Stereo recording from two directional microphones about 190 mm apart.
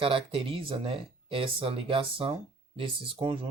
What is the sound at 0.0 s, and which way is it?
Speech, 25° right (ahead or behind).